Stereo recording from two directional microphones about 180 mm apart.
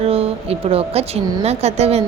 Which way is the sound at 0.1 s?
35° right (ahead or behind).